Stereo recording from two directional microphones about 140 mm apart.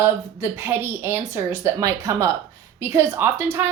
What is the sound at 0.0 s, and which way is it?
A woman's voice, 15° right (ahead or behind).